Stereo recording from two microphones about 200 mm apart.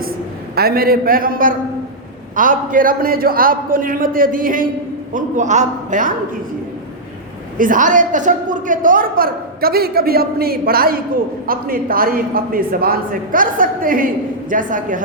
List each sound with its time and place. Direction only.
0.5 s a woman's voice: 50° right (ahead or behind)
7.6 s a woman's voice: 40° right (ahead or behind)